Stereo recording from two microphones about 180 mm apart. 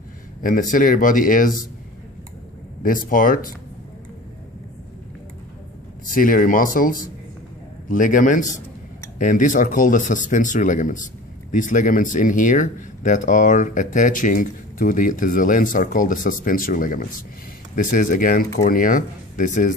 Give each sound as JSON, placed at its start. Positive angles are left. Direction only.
{"t": 0.4, "sound": "speech", "side_deg": 50}
{"t": 2.8, "sound": "speech", "side_deg": 50}
{"t": 6.0, "sound": "speech", "side_deg": 50}